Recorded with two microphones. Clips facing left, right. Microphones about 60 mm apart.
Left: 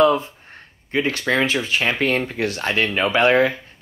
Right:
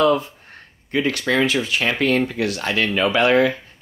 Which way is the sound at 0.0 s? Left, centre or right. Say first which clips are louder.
Left 1 dB; left.